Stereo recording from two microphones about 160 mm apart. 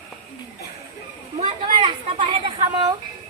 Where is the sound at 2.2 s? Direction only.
30° right (ahead or behind).